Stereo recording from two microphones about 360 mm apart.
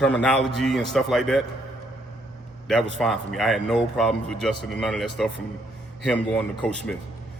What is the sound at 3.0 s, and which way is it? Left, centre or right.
A man's voice, centre.